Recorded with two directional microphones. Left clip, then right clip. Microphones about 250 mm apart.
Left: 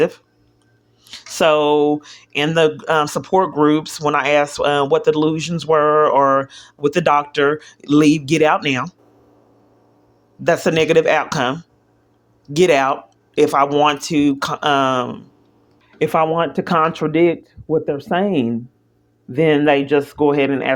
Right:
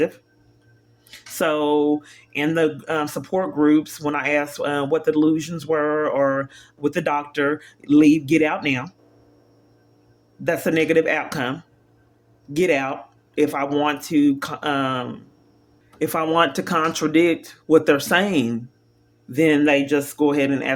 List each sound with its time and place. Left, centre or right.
1.0 s speech: centre
10.4 s speech: centre